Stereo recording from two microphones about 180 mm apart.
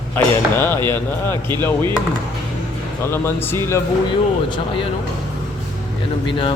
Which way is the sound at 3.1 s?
15° left (ahead or behind).